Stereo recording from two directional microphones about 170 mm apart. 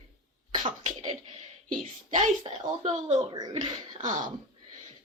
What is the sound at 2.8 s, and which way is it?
Speech, 40° right (ahead or behind).